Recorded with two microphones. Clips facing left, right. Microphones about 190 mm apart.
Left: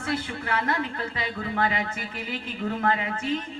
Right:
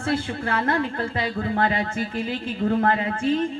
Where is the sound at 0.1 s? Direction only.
30° right (ahead or behind).